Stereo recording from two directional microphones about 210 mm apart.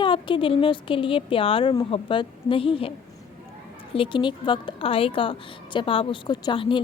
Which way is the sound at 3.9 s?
25° left (ahead or behind).